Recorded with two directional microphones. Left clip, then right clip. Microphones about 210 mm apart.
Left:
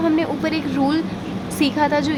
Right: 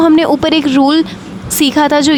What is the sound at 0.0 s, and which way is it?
A woman's voice, 45° right (ahead or behind).